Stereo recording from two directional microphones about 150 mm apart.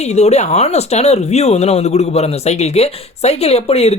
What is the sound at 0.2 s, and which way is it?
Speech, 45° left (ahead or behind).